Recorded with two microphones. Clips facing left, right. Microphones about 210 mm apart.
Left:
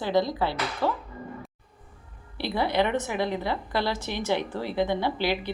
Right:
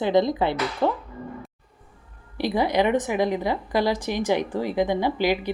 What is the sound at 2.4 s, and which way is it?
A woman's voice, 15° right (ahead or behind).